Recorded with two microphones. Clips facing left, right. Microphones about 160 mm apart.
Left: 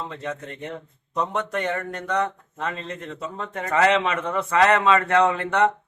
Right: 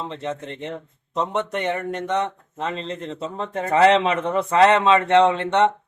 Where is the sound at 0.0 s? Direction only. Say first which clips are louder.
Right 3 dB; 25° right (ahead or behind).